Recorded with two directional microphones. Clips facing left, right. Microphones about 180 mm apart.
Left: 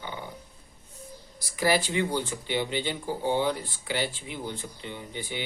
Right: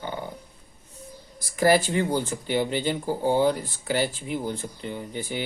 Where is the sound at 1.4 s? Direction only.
45° right (ahead or behind).